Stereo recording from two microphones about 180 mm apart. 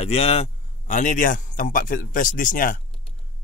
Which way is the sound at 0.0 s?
35° left (ahead or behind).